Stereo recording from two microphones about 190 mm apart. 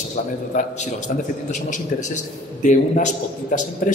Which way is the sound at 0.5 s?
40° left (ahead or behind).